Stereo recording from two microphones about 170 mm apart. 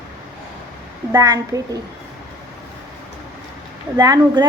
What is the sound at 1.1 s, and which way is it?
Speech, 20° right (ahead or behind).